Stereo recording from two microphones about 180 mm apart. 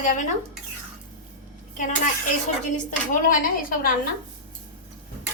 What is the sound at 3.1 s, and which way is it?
Speech, 50° left (ahead or behind).